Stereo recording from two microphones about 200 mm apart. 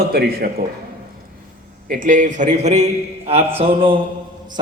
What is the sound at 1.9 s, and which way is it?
A man's voice, 40° right (ahead or behind).